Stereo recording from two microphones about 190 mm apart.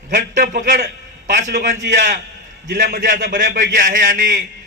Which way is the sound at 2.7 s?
65° right (ahead or behind).